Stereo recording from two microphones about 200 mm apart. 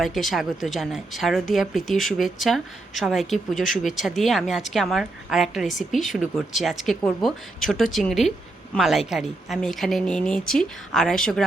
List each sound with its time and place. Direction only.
0.0 s a woman's voice: centre (ahead or behind)